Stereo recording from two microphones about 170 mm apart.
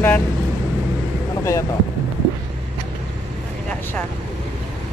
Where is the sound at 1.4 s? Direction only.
20° left (ahead or behind).